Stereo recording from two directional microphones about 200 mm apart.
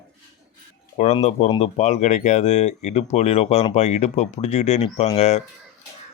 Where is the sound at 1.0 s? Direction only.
35° left (ahead or behind).